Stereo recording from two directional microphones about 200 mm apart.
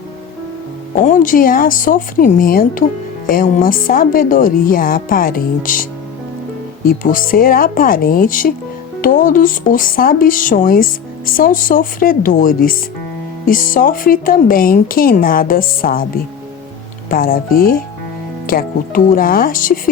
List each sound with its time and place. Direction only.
1.0 s speech: 40° left (ahead or behind)
17.1 s speech: 45° left (ahead or behind)